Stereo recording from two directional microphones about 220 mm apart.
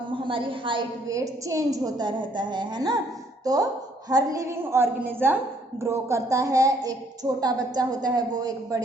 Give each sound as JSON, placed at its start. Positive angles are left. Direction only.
{"t": 0.1, "sound": "a woman's voice", "side_deg": -25}